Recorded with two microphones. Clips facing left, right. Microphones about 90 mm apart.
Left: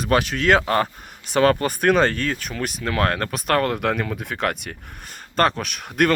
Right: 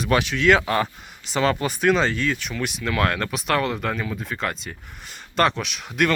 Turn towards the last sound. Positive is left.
turn(degrees=50)  # may be behind; listen again after turning